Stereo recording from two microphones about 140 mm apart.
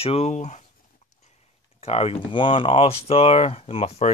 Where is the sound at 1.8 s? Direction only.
50° left (ahead or behind).